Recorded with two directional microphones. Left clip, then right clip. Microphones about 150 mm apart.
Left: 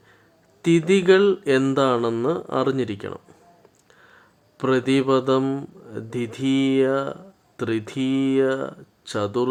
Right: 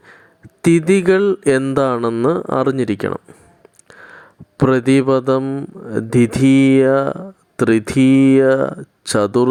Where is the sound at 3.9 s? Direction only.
45° right (ahead or behind).